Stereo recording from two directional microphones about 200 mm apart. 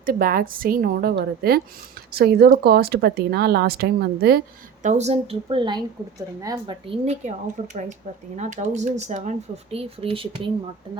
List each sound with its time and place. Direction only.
0.0 s speech: 45° right (ahead or behind); by 10.5 s 25° right (ahead or behind)